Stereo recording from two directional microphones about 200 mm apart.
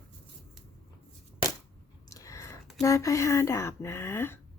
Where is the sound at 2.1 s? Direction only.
15° left (ahead or behind).